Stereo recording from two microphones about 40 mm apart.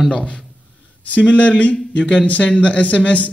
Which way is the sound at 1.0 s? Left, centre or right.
Left.